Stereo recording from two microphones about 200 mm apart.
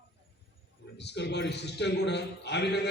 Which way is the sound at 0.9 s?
60° left (ahead or behind).